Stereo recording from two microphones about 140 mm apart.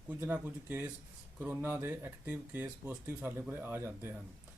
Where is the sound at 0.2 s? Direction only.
10° right (ahead or behind).